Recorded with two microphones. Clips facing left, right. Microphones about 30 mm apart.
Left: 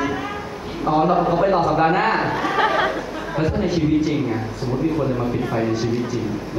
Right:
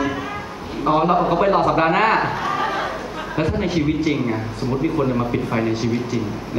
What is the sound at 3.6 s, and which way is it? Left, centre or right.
Speech, right.